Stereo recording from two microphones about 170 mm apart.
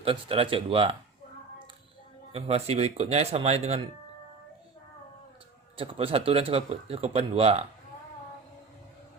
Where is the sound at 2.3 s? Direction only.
35° right (ahead or behind).